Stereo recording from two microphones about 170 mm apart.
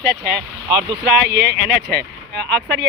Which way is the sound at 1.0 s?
75° right (ahead or behind).